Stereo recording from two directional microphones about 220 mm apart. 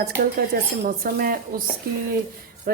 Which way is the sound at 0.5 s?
40° right (ahead or behind).